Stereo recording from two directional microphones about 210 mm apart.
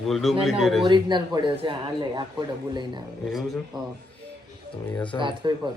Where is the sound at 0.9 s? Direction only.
20° right (ahead or behind).